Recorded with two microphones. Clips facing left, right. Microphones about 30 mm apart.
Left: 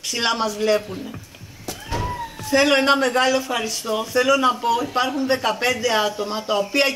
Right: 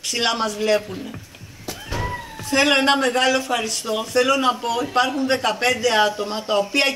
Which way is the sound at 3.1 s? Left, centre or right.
Right.